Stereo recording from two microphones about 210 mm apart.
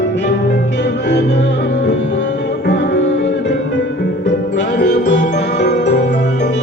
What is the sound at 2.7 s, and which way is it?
Music, 55° left (ahead or behind).